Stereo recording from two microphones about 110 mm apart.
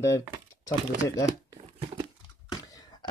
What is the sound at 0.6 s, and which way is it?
Speech, 30° left (ahead or behind).